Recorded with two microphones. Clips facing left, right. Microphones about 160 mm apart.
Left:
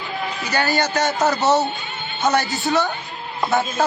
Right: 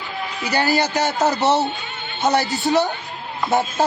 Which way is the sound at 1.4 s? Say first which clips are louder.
Even; 30° right (ahead or behind).